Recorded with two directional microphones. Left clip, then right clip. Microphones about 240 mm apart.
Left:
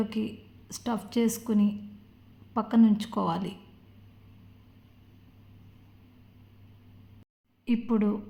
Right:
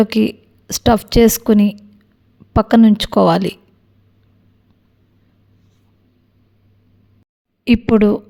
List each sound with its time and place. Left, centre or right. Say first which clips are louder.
0.0 s a woman's voice: right 17 dB; right
7.6 s a woman's voice: right 15 dB; right